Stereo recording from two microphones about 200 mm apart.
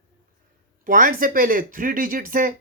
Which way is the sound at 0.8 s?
45° right (ahead or behind).